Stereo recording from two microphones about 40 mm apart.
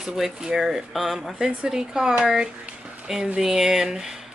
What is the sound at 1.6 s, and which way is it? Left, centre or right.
Speech, centre.